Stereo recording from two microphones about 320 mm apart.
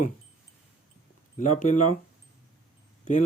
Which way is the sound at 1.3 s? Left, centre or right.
Left.